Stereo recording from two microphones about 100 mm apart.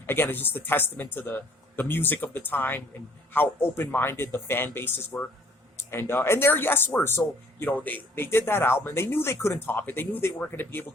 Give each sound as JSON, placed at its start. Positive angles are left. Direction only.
{"t": 0.0, "sound": "speech", "side_deg": 20}